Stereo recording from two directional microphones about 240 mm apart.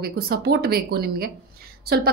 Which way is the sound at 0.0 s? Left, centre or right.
Right.